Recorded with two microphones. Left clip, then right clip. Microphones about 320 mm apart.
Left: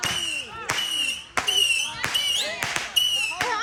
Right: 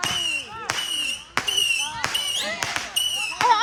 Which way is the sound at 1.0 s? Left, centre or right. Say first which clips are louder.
Even; right.